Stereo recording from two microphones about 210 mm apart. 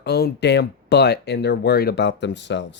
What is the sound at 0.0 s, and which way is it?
Speech, 50° left (ahead or behind).